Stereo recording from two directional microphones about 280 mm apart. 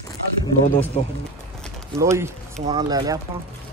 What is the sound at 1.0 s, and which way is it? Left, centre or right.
Speech, left.